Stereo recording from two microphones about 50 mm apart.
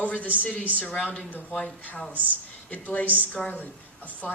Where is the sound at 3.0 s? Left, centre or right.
Right.